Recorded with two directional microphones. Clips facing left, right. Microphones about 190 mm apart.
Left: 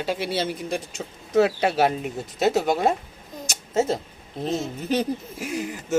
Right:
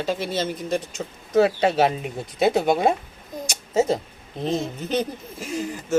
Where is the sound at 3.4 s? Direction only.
Centre (ahead or behind).